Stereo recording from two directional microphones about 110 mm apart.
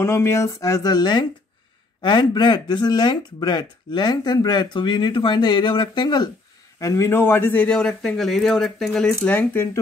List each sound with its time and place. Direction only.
0.0 s speech: 25° left (ahead or behind); by 6.3 s 40° left (ahead or behind)
6.8 s a man's voice: 30° left (ahead or behind)